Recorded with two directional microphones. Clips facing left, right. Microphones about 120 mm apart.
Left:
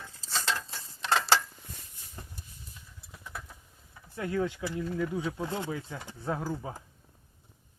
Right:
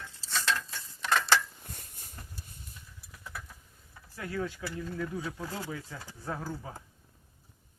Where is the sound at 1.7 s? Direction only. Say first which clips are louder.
Right 1 dB; 55° right (ahead or behind).